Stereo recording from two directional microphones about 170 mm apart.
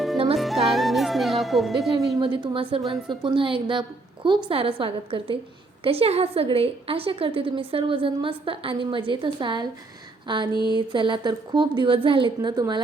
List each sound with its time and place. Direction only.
0.3 s speech: centre (ahead or behind)
2.1 s a woman's voice: 30° right (ahead or behind)
10.5 s a sound: 25° left (ahead or behind)
10.8 s a woman's voice: 25° right (ahead or behind)